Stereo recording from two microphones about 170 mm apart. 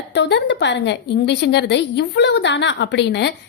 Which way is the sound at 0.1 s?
90° left.